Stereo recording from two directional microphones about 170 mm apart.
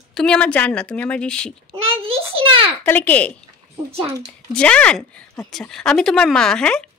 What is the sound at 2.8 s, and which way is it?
A woman's voice, 10° left (ahead or behind).